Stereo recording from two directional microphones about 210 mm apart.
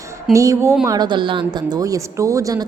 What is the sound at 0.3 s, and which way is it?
A woman's voice, 15° right (ahead or behind).